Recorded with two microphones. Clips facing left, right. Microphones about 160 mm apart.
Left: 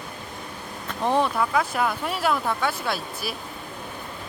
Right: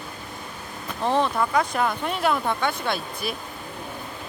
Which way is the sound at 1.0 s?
10° left (ahead or behind).